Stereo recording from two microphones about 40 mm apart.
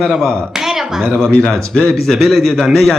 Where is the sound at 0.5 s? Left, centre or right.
Centre.